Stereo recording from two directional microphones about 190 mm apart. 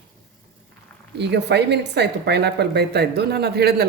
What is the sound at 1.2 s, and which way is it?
A woman's voice, 65° right (ahead or behind).